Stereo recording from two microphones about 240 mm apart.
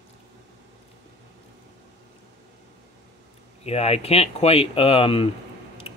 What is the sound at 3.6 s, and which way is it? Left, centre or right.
Speech, left.